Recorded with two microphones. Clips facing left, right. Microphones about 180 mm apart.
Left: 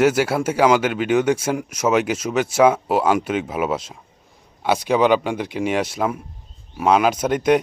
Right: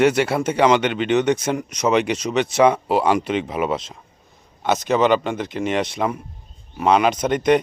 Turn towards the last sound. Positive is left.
turn(degrees=5)  # may be behind; listen again after turning